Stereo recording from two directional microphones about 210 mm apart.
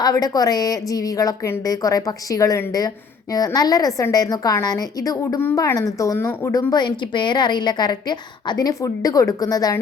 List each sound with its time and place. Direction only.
0.0 s a woman's voice: 15° left (ahead or behind)